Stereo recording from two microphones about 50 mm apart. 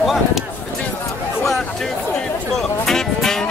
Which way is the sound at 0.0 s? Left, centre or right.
Centre.